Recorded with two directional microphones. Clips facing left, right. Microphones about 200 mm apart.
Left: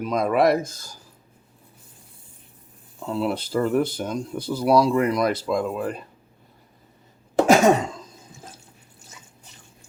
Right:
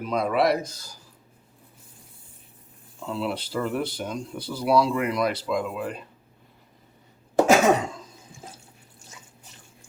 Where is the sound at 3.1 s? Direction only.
45° left (ahead or behind).